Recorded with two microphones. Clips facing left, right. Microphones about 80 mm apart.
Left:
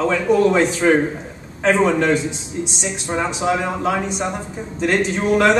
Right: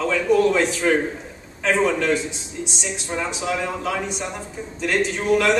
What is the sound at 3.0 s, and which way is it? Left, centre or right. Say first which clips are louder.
A man's voice: left 6 dB; left.